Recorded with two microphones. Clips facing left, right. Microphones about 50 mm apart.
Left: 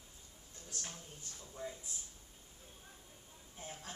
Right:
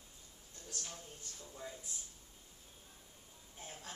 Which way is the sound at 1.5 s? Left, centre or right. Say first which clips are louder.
Left 3 dB; centre.